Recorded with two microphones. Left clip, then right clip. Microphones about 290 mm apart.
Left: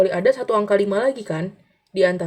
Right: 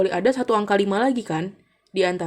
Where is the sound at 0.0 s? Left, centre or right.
Centre.